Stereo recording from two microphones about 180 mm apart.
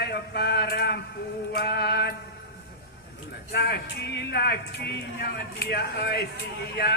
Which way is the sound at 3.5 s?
60° left (ahead or behind).